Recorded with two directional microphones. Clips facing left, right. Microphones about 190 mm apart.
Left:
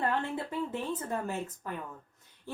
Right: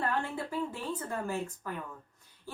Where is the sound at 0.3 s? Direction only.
20° left (ahead or behind).